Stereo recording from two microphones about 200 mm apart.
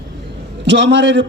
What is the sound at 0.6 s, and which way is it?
Speech, 65° right (ahead or behind).